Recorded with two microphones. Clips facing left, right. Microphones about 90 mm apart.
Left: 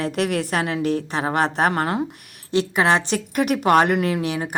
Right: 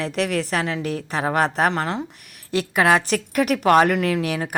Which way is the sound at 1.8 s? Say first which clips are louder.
Left 2 dB; 10° left (ahead or behind).